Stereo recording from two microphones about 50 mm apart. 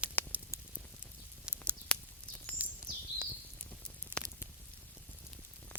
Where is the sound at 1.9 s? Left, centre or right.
Centre.